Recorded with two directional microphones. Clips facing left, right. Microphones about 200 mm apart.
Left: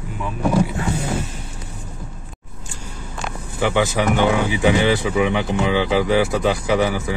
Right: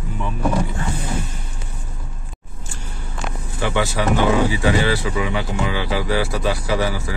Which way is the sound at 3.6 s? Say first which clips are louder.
Left 2 dB; 15° left (ahead or behind).